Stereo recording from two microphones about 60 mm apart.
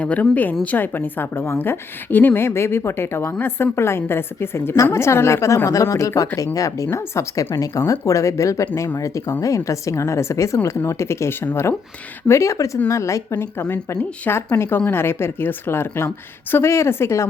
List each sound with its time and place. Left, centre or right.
0.0 s a woman's voice: left
6.9 s a woman's voice: left
12.3 s a woman's voice: left
13.3 s a woman's voice: left